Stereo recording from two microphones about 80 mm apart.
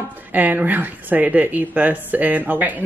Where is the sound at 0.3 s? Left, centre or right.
Right.